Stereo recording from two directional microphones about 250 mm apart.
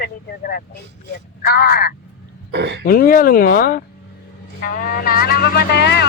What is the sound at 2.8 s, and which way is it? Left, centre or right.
Speech, left.